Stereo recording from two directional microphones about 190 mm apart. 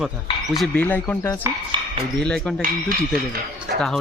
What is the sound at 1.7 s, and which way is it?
Speech, 25° right (ahead or behind).